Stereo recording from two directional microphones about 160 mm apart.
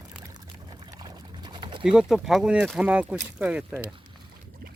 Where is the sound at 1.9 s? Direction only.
5° right (ahead or behind).